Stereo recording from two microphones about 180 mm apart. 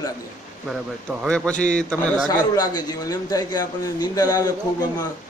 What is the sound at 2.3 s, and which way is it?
A man's voice, 20° left (ahead or behind).